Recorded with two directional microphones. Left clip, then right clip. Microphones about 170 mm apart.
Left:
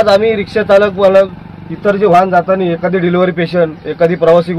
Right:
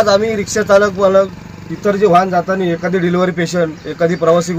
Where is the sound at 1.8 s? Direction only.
10° right (ahead or behind).